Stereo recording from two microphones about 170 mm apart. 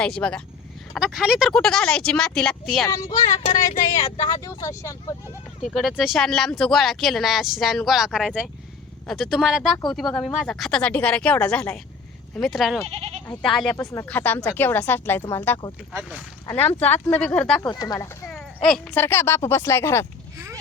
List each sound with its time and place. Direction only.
0.0 s speech: 5° left (ahead or behind)
0.9 s speech: 5° right (ahead or behind)
2.8 s speech: 20° left (ahead or behind)
3.6 s speech: 50° left (ahead or behind)
3.9 s speech: 30° left (ahead or behind)
4.4 s speech: 20° left (ahead or behind)
5.7 s speech: centre (ahead or behind)
12.9 s goat: 35° right (ahead or behind)
13.2 s speech: 5° left (ahead or behind)
13.7 s speech: 15° left (ahead or behind)
15.9 s speech: 5° right (ahead or behind)
16.5 s speech: 10° left (ahead or behind)
17.6 s speech: 25° left (ahead or behind)
18.3 s speech: 5° left (ahead or behind)